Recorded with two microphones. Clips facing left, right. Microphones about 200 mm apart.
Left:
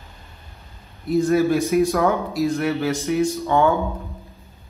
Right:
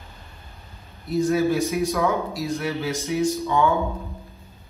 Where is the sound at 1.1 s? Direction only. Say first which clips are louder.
Left 3 dB; 50° left (ahead or behind).